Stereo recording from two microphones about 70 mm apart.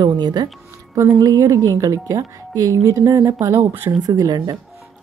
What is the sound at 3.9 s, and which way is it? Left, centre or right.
Speech, right.